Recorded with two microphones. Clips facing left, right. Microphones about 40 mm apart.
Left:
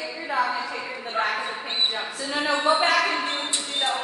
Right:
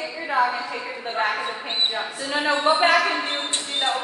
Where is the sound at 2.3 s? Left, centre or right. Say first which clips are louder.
Right 2 dB; right.